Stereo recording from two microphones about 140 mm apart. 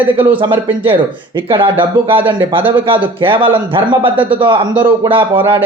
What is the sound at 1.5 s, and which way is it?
A man's voice, 35° right (ahead or behind).